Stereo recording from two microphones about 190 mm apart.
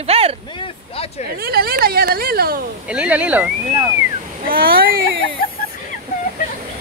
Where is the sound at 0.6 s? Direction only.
30° left (ahead or behind).